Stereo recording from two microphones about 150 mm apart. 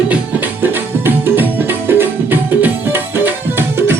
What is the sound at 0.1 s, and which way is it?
Music, 10° right (ahead or behind).